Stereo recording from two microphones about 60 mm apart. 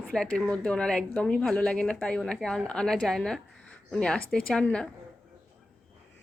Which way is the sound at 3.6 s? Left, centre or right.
Centre.